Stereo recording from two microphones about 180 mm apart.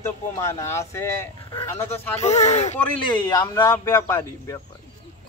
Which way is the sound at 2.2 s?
35° left (ahead or behind).